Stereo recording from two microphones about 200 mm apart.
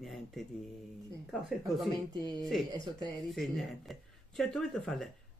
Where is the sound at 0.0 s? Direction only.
Centre (ahead or behind).